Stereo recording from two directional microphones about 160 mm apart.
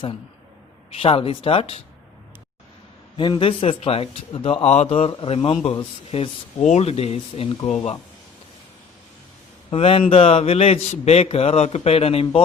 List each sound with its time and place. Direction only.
0.9 s a man's voice: 35° left (ahead or behind)
3.2 s a man's voice: 30° left (ahead or behind)
9.6 s a man's voice: 35° left (ahead or behind)